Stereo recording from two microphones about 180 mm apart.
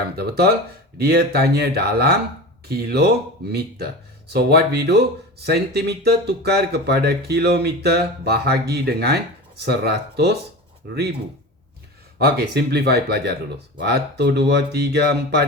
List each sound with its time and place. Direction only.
0.2 s speech: 60° right (ahead or behind)
4.3 s speech: 65° right (ahead or behind)
12.2 s speech: 65° right (ahead or behind)